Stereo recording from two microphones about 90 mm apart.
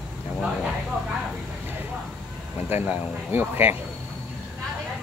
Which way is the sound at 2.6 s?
25° right (ahead or behind).